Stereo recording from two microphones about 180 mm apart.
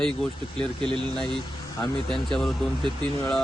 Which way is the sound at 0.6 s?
30° right (ahead or behind).